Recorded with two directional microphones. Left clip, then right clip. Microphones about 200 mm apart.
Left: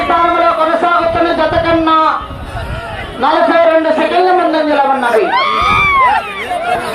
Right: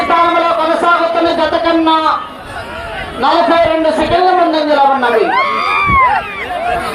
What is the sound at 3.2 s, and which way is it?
A man's voice, 5° right (ahead or behind).